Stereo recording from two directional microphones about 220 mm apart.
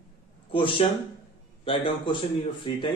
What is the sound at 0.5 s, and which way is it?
A man's voice, 25° left (ahead or behind).